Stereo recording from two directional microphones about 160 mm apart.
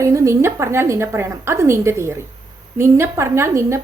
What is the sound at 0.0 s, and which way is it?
A woman's voice, 20° right (ahead or behind).